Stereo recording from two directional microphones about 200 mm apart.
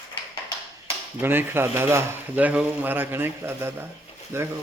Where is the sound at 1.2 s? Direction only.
10° right (ahead or behind).